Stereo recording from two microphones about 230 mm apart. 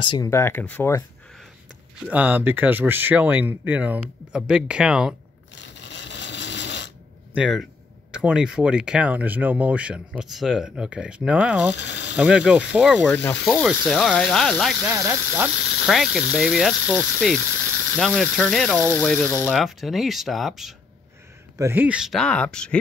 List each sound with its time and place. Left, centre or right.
0.0 s speech: centre
2.0 s speech: centre
5.5 s a sound: left
7.3 s speech: centre
11.7 s speech: left
12.2 s speech: centre